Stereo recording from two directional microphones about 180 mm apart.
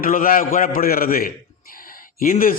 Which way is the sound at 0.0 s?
50° left (ahead or behind).